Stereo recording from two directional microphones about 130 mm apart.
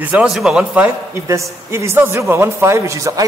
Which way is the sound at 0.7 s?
20° right (ahead or behind).